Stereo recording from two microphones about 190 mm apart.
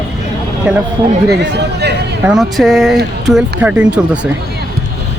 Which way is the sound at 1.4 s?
60° right (ahead or behind).